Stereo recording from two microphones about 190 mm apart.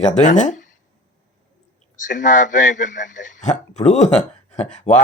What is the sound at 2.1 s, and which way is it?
Speech, 40° left (ahead or behind).